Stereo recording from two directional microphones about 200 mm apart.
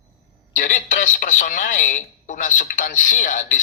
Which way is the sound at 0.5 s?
40° left (ahead or behind).